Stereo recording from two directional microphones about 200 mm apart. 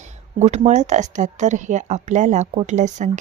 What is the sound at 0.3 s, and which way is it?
Speech, 35° right (ahead or behind).